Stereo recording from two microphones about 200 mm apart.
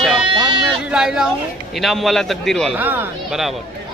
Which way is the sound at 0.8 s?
5° right (ahead or behind).